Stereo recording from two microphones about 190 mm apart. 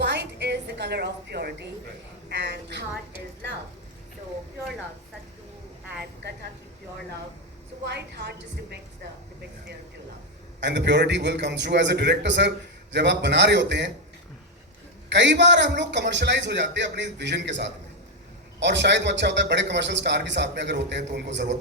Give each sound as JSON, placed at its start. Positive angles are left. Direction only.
{"t": 0.0, "sound": "a sound", "side_deg": -65}
{"t": 2.3, "sound": "a man's voice", "side_deg": -65}
{"t": 7.9, "sound": "a man's voice", "side_deg": -65}
{"t": 10.6, "sound": "a man's voice", "side_deg": -65}
{"t": 15.1, "sound": "a man's voice", "side_deg": -70}